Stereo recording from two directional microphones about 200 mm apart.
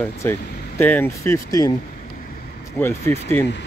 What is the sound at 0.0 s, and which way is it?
Speech, 10° left (ahead or behind).